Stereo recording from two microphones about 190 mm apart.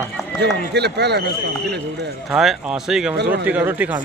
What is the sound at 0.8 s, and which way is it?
A man's voice, 60° right (ahead or behind).